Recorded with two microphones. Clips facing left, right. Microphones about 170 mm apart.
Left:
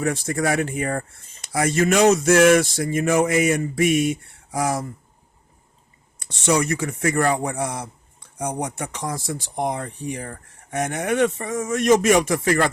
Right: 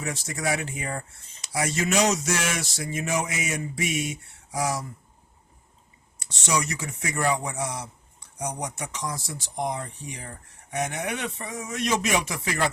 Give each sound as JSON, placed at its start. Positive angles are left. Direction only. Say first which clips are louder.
{"t": 0.0, "sound": "speech", "louder": "left 8 dB", "side_deg": 55}
{"t": 6.1, "sound": "speech", "louder": "left 7 dB", "side_deg": 55}